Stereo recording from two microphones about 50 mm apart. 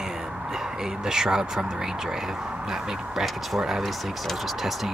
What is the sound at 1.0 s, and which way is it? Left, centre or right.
Speech, centre.